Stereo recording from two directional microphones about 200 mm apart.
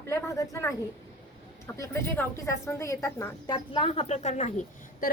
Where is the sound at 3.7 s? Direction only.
30° left (ahead or behind).